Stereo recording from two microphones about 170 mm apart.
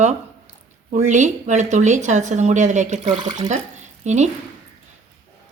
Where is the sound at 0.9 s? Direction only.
45° right (ahead or behind).